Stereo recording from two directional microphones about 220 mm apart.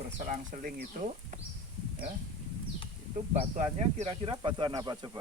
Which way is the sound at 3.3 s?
30° right (ahead or behind).